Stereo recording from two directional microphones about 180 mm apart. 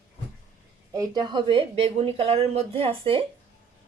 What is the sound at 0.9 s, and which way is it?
Speech, 25° right (ahead or behind).